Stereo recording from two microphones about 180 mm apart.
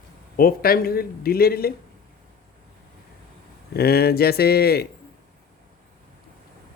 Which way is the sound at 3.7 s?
60° left (ahead or behind).